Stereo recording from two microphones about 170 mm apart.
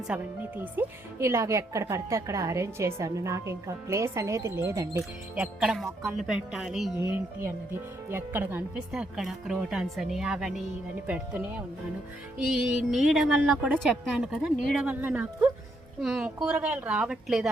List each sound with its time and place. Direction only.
0.1 s speech: 10° right (ahead or behind)
7.0 s speech: 15° right (ahead or behind)